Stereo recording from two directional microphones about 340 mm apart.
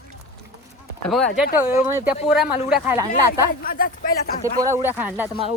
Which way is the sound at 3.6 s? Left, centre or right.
Left.